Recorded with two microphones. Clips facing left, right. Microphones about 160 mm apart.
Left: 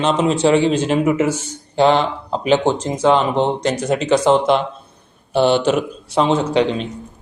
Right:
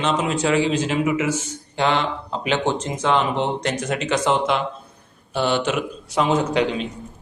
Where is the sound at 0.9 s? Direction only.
45° left (ahead or behind).